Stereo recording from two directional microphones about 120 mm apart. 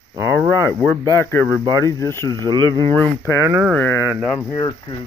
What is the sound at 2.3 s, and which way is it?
Speech, 35° right (ahead or behind).